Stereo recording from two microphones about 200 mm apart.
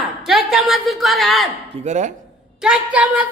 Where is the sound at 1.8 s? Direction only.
35° right (ahead or behind).